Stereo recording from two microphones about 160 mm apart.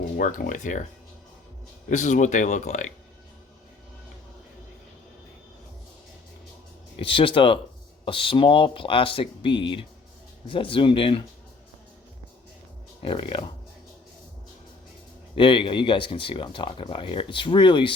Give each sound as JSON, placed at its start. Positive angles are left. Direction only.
{"t": 0.2, "sound": "speech", "side_deg": 55}
{"t": 1.9, "sound": "speech", "side_deg": 50}
{"t": 7.0, "sound": "speech", "side_deg": 30}
{"t": 13.0, "sound": "speech", "side_deg": 35}
{"t": 15.4, "sound": "speech", "side_deg": 30}